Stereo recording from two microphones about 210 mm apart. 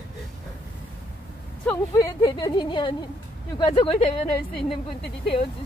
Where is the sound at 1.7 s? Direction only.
15° left (ahead or behind).